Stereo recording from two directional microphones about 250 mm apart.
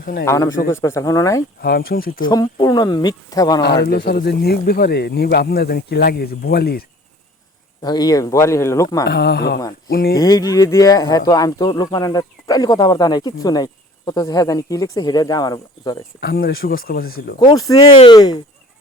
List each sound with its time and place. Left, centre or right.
0.0 s a man's voice: left
0.3 s speech: centre
1.6 s speech: left
2.3 s speech: centre
3.8 s speech: left
7.8 s speech: centre
9.0 s speech: left
10.2 s speech: centre
16.2 s speech: left
17.4 s speech: centre